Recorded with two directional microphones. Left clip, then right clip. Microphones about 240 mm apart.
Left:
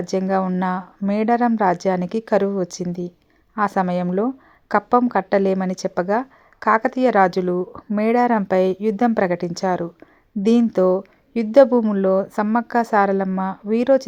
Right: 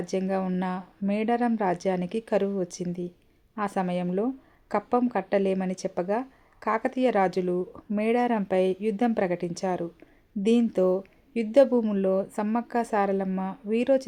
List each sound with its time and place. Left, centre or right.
0.0 s speech: centre